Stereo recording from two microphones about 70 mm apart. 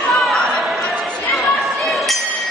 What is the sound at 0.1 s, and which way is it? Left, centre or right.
Chatter, centre.